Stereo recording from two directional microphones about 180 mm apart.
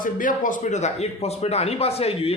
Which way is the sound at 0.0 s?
45° left (ahead or behind).